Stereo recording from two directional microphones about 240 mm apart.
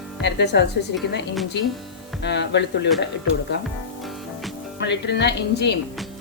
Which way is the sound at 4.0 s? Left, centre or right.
Centre.